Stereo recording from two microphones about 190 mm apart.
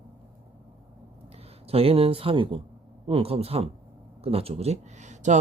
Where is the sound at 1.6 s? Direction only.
30° right (ahead or behind).